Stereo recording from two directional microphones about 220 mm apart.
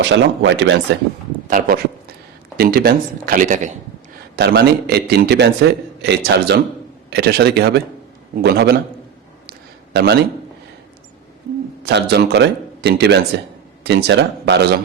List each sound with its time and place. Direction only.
0.0 s speech: 55° right (ahead or behind)
1.5 s speech: 40° right (ahead or behind)
4.4 s a man's voice: 45° right (ahead or behind)
9.5 s a sound: 45° right (ahead or behind)
11.9 s a man's voice: 50° right (ahead or behind)